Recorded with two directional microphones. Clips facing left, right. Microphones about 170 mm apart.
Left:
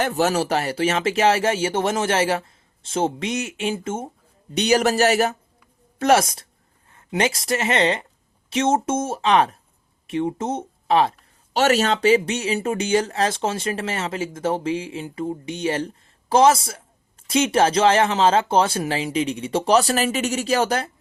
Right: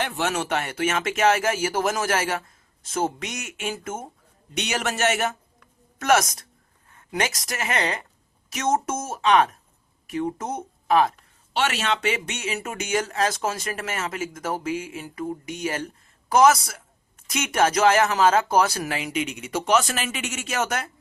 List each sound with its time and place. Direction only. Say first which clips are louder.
0.0 s speech: left 6 dB; 40° left (ahead or behind)
11.5 s speech: left 6 dB; 40° left (ahead or behind)